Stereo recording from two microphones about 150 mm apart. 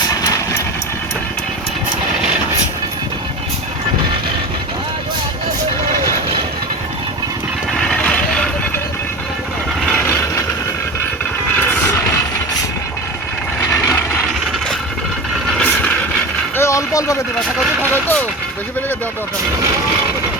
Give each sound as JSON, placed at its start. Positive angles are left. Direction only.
{"t": 0.2, "sound": "vehicle", "side_deg": 25}
{"t": 7.8, "sound": "music", "side_deg": 5}
{"t": 13.6, "sound": "vehicle", "side_deg": 20}
{"t": 15.4, "sound": "mechanisms", "side_deg": 5}
{"t": 16.6, "sound": "vehicle", "side_deg": 20}